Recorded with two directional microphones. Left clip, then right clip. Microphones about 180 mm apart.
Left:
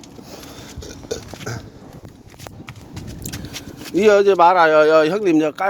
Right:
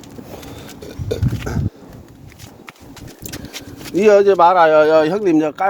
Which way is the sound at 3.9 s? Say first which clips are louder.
Right 2 dB; 5° left (ahead or behind).